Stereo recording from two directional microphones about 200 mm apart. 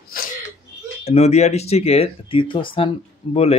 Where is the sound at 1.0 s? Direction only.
30° left (ahead or behind).